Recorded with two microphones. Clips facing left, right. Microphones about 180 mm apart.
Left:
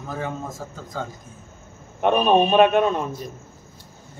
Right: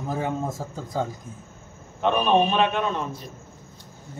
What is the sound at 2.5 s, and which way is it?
Speech, 50° left (ahead or behind).